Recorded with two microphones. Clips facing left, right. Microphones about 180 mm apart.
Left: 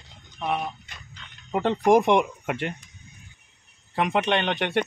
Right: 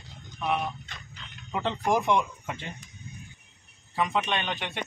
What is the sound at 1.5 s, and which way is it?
Speech, 45° left (ahead or behind).